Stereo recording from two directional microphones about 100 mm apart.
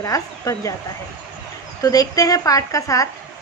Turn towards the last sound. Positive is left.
turn(degrees=35)  # may be behind; listen again after turning